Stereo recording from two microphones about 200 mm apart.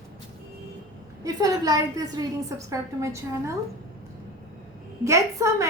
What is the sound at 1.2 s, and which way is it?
A woman's voice, 20° right (ahead or behind).